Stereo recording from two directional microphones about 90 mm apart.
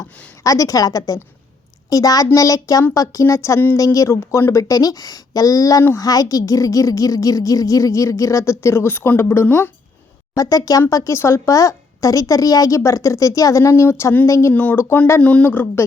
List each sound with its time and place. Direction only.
0.4 s a woman's voice: 40° left (ahead or behind)
10.3 s a woman's voice: 40° left (ahead or behind)
14.5 s speech: 20° left (ahead or behind)
15.2 s speech: 15° left (ahead or behind)